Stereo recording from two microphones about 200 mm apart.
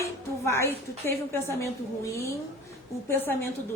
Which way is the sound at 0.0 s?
15° left (ahead or behind).